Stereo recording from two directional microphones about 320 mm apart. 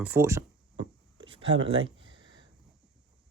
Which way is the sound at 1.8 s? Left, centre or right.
Right.